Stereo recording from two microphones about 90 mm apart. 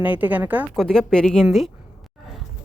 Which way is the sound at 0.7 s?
5° left (ahead or behind).